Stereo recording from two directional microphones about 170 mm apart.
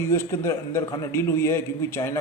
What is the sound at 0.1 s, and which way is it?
A man's voice, 15° left (ahead or behind).